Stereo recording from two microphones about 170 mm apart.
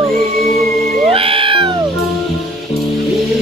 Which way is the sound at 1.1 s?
30° right (ahead or behind).